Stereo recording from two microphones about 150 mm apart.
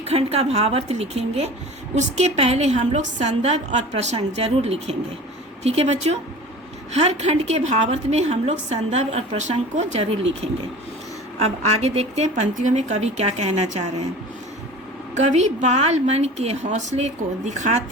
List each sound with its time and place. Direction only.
0.0 s a woman's voice: 45° right (ahead or behind)
11.3 s a woman's voice: 45° right (ahead or behind)
15.1 s a woman's voice: 50° right (ahead or behind)